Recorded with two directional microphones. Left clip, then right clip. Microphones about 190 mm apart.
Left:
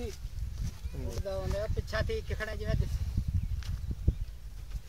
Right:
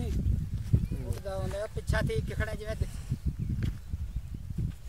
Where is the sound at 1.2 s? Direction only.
60° right (ahead or behind).